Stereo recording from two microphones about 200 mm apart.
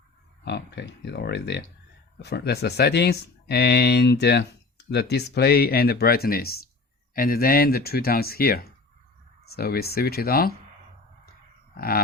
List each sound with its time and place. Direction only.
0.4 s speech: 60° left (ahead or behind)
11.8 s speech: 50° left (ahead or behind)